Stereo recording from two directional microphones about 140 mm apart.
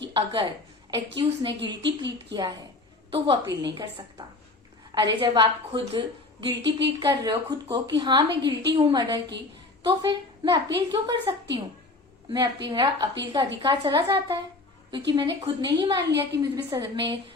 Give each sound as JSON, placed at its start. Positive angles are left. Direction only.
{"t": 0.1, "sound": "a woman's voice", "side_deg": -40}
{"t": 4.9, "sound": "a woman's voice", "side_deg": -35}